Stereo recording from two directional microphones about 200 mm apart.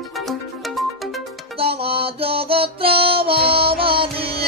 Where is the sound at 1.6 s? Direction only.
30° right (ahead or behind).